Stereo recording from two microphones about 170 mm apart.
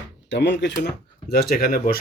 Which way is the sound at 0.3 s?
90° left.